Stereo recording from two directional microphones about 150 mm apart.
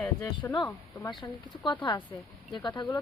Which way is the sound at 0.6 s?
25° left (ahead or behind).